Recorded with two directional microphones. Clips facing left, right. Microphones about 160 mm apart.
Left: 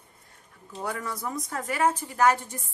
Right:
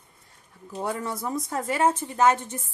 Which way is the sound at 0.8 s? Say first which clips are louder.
Right 3 dB; 25° right (ahead or behind).